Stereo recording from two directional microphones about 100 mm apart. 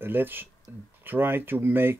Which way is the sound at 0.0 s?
20° right (ahead or behind).